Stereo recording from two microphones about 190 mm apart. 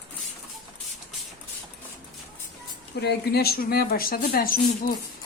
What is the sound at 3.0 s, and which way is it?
Speech, 60° left (ahead or behind).